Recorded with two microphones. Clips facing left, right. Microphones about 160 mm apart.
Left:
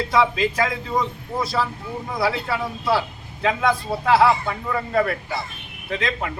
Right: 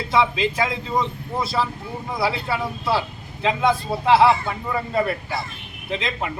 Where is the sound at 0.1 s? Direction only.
25° right (ahead or behind).